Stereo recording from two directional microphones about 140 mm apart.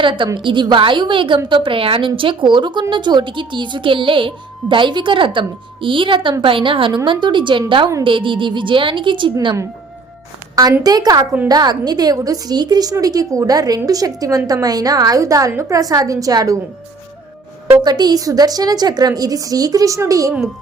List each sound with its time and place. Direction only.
0.0 s speech: 35° right (ahead or behind)
10.5 s a woman's voice: 25° right (ahead or behind)
17.8 s a woman's voice: 30° right (ahead or behind)